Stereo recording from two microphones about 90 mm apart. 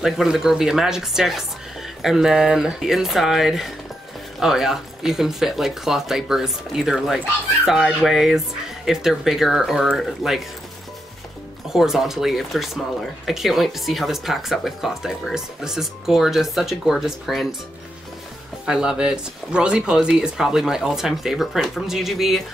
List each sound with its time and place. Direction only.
0.0 s speech: 5° right (ahead or behind)
11.7 s speech: 5° right (ahead or behind)
18.7 s speech: 10° right (ahead or behind)